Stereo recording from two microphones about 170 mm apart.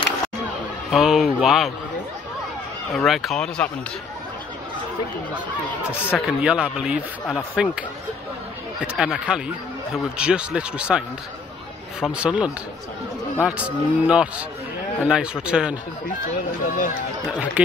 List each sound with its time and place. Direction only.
0.9 s speech: 5° right (ahead or behind)
3.1 s speech: centre (ahead or behind)
6.0 s speech: 5° right (ahead or behind)
8.8 s speech: 5° right (ahead or behind)
16.6 s speech: 50° left (ahead or behind)